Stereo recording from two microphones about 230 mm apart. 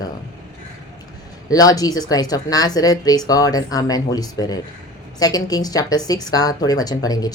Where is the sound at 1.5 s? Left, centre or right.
Centre.